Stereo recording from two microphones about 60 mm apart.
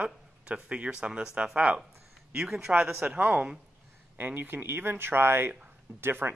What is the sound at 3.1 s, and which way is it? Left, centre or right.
Speech, right.